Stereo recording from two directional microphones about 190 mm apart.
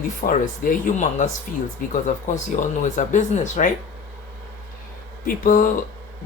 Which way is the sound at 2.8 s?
40° left (ahead or behind).